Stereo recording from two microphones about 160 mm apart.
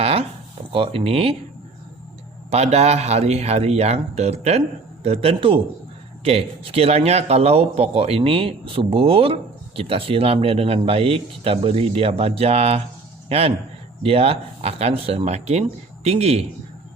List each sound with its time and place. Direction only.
0.0 s a sound: 40° right (ahead or behind)
0.7 s speech: 35° right (ahead or behind)
2.5 s a man's voice: 40° right (ahead or behind)